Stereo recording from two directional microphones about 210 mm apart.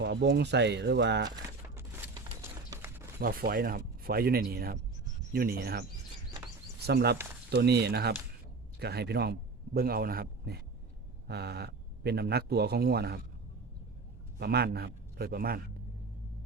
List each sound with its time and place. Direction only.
0.0 s speech: 50° right (ahead or behind)
2.4 s a sound: 10° right (ahead or behind)
3.2 s speech: 45° right (ahead or behind)
6.8 s a man's voice: 50° right (ahead or behind)
14.3 s a man's voice: 50° right (ahead or behind)